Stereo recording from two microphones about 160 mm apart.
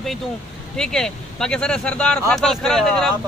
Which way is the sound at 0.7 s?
5° left (ahead or behind).